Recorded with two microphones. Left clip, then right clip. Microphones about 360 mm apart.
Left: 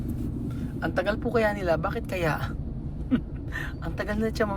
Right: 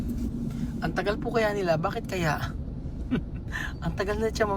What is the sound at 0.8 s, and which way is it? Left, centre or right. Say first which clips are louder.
Speech: left 2 dB; centre.